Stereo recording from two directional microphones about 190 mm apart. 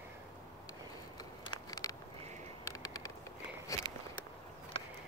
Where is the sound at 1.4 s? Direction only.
20° left (ahead or behind).